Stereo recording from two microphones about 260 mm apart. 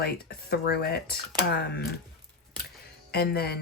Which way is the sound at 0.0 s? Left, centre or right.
Left.